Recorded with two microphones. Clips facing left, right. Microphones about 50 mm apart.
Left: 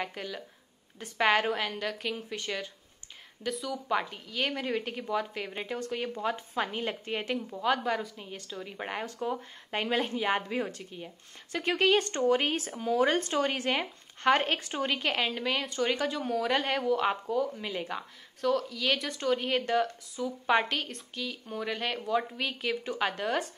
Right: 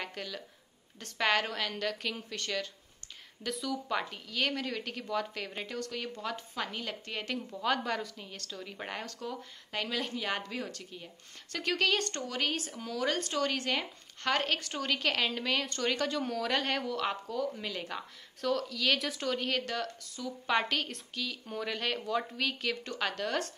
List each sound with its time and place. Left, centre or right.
0.0 s speech: centre
3.4 s speech: centre
5.8 s a woman's voice: left
7.3 s a woman's voice: centre